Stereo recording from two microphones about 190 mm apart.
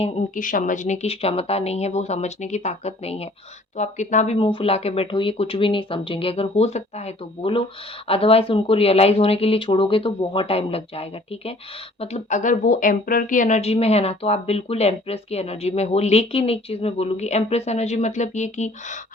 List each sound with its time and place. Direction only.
0.0 s a woman's voice: 45° left (ahead or behind)
4.4 s a woman's voice: 25° left (ahead or behind)